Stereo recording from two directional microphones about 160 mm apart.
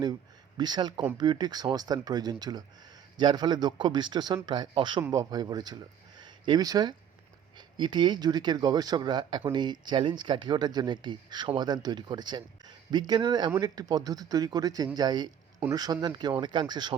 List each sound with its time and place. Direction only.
0.0 s speech: 25° right (ahead or behind)
6.1 s a sound: 30° right (ahead or behind)
7.5 s speech: 30° right (ahead or behind)